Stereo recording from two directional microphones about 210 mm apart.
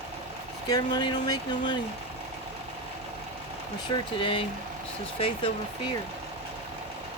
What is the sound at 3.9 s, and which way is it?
Speech, 25° left (ahead or behind).